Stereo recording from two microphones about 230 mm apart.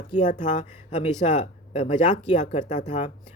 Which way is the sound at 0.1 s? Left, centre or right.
Left.